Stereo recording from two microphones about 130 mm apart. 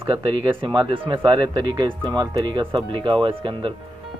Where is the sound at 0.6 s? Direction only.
40° right (ahead or behind).